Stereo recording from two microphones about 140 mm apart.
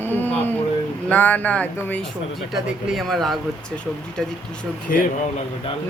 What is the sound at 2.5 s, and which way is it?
Speech, centre (ahead or behind).